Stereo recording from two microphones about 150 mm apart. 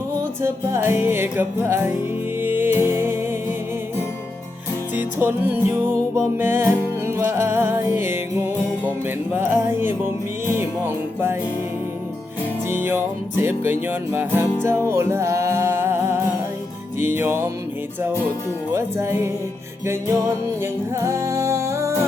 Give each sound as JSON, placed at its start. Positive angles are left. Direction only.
{"t": 0.2, "sound": "music", "side_deg": -15}
{"t": 4.9, "sound": "music", "side_deg": -15}
{"t": 12.7, "sound": "music", "side_deg": -15}
{"t": 18.7, "sound": "music", "side_deg": -15}
{"t": 20.6, "sound": "music", "side_deg": -20}